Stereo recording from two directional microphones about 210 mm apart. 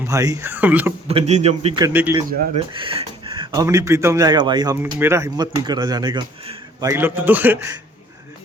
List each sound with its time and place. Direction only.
0.0 s a man's voice: 15° right (ahead or behind)
1.0 s speech: 30° right (ahead or behind)
1.8 s a man's voice: 10° right (ahead or behind)
2.7 s speech: 25° right (ahead or behind)
6.8 s a man's voice: 10° right (ahead or behind)